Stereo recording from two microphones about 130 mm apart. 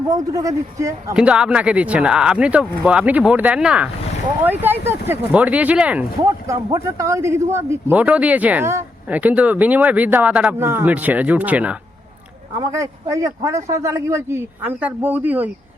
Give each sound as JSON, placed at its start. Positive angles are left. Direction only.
{"t": 0.1, "sound": "speech", "side_deg": -25}
{"t": 1.1, "sound": "speech", "side_deg": -10}
{"t": 6.2, "sound": "speech", "side_deg": -25}
{"t": 12.5, "sound": "speech", "side_deg": -25}